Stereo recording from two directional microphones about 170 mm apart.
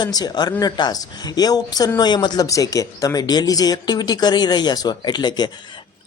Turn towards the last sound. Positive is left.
turn(degrees=25)  # may be behind; listen again after turning